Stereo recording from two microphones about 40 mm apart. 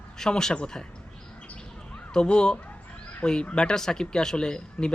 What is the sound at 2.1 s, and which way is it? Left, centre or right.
Speech, left.